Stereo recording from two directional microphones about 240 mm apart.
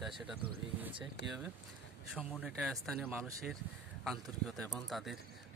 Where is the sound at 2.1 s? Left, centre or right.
Centre.